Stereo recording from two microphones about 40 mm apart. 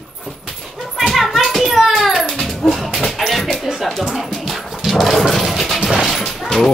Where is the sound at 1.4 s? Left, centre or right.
Centre.